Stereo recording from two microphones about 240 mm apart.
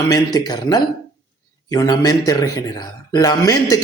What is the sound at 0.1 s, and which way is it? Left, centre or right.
Speech, centre.